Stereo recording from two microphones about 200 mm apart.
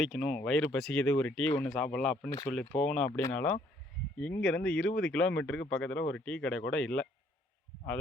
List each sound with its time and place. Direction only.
0.0 s speech: centre (ahead or behind)
3.1 s speech: 15° left (ahead or behind)
4.2 s speech: 5° left (ahead or behind)